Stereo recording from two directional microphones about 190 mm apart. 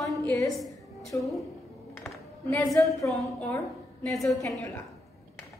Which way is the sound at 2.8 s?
10° left (ahead or behind).